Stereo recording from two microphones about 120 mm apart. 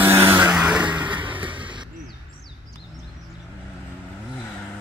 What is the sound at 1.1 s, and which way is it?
Music, 45° right (ahead or behind).